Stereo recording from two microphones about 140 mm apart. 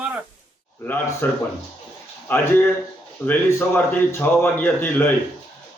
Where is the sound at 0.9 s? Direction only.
15° left (ahead or behind).